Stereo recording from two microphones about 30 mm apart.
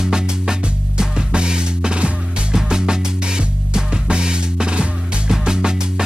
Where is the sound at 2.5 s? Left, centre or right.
Right.